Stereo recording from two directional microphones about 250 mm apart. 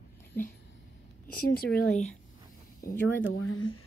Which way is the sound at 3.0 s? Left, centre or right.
Left.